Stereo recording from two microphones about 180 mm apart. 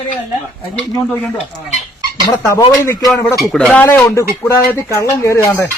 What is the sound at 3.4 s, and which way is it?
A man's voice, 5° left (ahead or behind).